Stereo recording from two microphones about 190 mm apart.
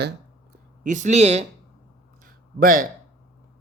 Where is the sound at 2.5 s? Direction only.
50° right (ahead or behind).